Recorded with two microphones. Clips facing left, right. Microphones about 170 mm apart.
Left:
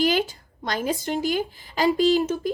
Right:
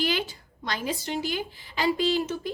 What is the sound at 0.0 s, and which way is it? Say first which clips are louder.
A woman's voice: left 6 dB; 45° left (ahead or behind).